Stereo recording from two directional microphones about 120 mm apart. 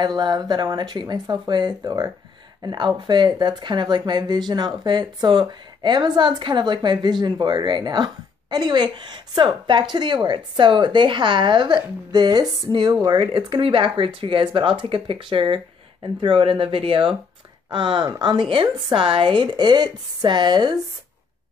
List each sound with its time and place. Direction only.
0.0 s speech: 40° right (ahead or behind)